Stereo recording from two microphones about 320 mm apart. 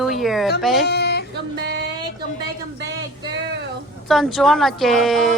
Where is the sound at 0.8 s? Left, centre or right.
Left.